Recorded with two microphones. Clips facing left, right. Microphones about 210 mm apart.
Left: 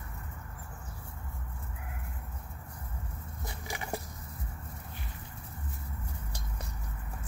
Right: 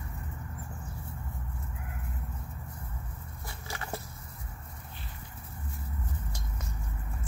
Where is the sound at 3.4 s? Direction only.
15° left (ahead or behind).